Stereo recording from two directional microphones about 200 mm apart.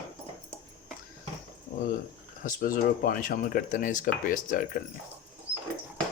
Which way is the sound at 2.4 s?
45° left (ahead or behind).